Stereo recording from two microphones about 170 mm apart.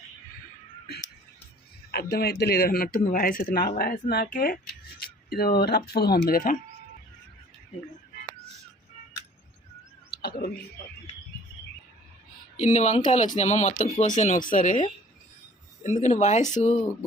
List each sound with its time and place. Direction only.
1.9 s speech: 70° left (ahead or behind)
10.1 s a sound: 70° left (ahead or behind)
12.5 s speech: 40° left (ahead or behind)